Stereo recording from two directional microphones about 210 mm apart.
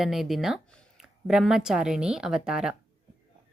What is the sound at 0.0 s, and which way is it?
Speech, centre (ahead or behind).